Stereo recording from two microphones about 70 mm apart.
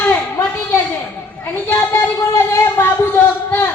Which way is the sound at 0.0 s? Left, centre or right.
Left.